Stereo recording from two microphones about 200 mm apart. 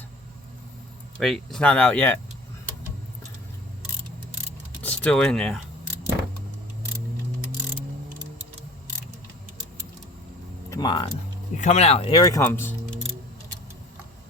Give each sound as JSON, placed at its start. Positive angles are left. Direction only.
{"t": 1.2, "sound": "speech", "side_deg": 0}
{"t": 4.8, "sound": "speech", "side_deg": 5}
{"t": 10.7, "sound": "speech", "side_deg": 20}
{"t": 11.5, "sound": "speech", "side_deg": 35}